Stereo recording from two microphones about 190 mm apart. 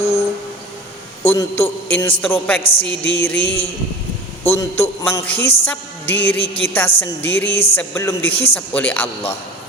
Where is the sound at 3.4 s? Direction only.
30° left (ahead or behind).